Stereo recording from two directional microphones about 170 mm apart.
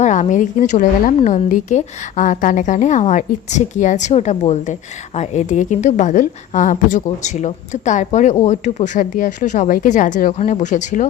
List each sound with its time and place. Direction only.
0.0 s a woman's voice: 45° left (ahead or behind)